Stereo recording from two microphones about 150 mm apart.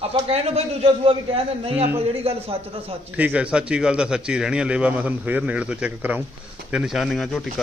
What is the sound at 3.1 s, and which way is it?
A man's voice, 10° right (ahead or behind).